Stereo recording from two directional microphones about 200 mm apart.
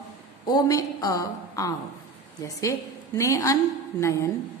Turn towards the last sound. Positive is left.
turn(degrees=15)  # may be behind; listen again after turning